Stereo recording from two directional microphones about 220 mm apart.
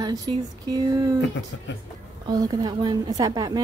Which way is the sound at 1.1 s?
55° left (ahead or behind).